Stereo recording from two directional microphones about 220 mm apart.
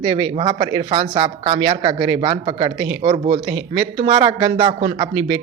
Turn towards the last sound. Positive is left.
turn(degrees=-20)  # may be behind; listen again after turning